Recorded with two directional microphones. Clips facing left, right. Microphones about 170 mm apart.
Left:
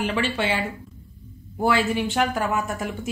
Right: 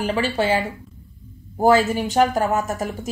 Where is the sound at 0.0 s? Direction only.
40° right (ahead or behind).